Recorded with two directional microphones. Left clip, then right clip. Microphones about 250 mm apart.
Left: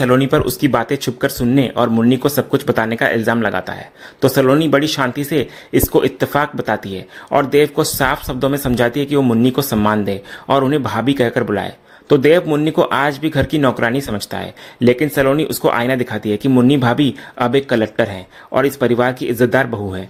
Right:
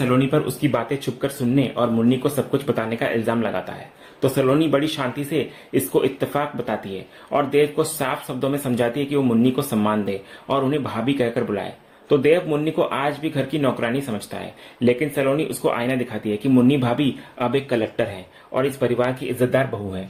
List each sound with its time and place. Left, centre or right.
0.0 s speech: left